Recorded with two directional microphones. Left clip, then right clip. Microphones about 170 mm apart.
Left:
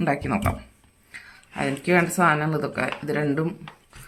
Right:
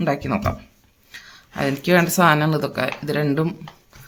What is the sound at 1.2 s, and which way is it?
Speech, 30° right (ahead or behind).